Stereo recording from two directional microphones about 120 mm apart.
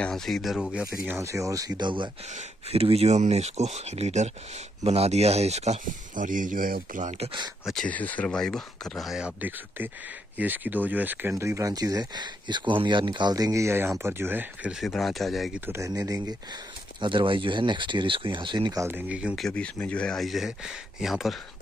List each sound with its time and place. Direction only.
0.0 s speech: 5° left (ahead or behind)
1.1 s speech: 25° right (ahead or behind)
2.3 s speech: 55° right (ahead or behind); by 7.2 s 80° right
7.8 s speech: 15° left (ahead or behind)
10.3 s speech: 15° right (ahead or behind)
14.8 s speech: centre (ahead or behind)
15.6 s speech: 25° right (ahead or behind)
17.0 s speech: 45° right (ahead or behind)
18.8 s speech: 15° right (ahead or behind)
19.3 s speech: 5° left (ahead or behind)